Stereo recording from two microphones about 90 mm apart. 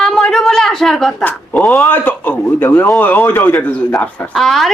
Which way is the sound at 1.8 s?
20° left (ahead or behind).